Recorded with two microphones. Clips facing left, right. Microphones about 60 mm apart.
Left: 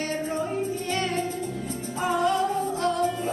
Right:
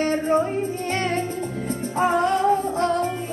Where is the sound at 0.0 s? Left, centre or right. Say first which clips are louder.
Right 8 dB; right.